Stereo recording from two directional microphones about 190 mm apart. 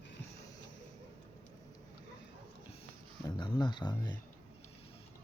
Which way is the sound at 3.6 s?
25° left (ahead or behind).